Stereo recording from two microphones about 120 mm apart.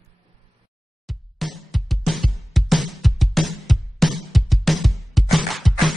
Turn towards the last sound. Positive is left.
turn(degrees=0)  # may be behind; listen again after turning